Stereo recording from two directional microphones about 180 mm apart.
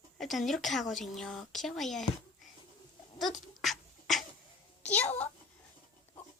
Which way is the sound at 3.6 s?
Centre (ahead or behind).